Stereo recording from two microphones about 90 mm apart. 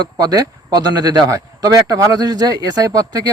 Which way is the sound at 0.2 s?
45° right (ahead or behind).